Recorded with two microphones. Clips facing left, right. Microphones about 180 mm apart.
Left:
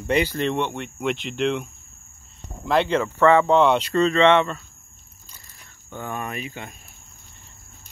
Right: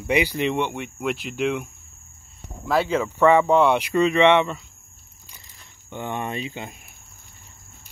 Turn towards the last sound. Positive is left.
turn(degrees=-25)  # may be behind; listen again after turning